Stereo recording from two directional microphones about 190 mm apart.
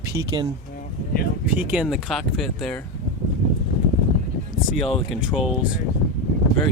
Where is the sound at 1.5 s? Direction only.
5° right (ahead or behind).